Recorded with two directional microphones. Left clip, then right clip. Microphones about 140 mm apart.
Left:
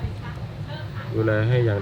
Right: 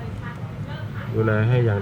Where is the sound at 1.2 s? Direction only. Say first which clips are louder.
Left 1 dB; 5° left (ahead or behind).